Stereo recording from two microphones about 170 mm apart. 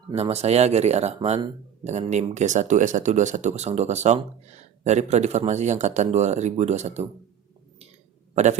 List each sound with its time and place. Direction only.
0.1 s speech: 40° right (ahead or behind)